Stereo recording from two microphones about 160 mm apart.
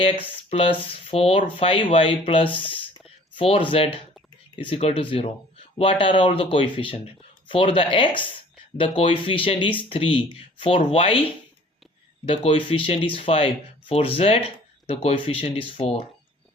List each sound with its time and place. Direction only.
0.5 s speech: 35° left (ahead or behind)
12.2 s speech: 40° left (ahead or behind)